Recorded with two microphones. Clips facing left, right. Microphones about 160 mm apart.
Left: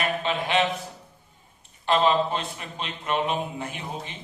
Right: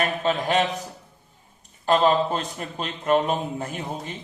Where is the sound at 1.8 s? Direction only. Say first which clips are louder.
Right 2 dB; 45° right (ahead or behind).